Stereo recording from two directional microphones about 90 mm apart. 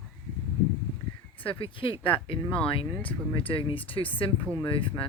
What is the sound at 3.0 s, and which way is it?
Speech, 70° left (ahead or behind).